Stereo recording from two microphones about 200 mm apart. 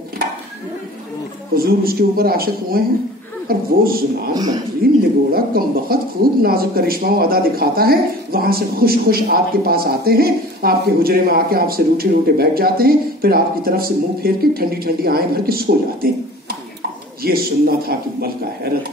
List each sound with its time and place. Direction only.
1.6 s speech: 50° right (ahead or behind)
4.3 s speech: 20° right (ahead or behind)
5.3 s speech: 50° right (ahead or behind)
17.2 s speech: 50° right (ahead or behind)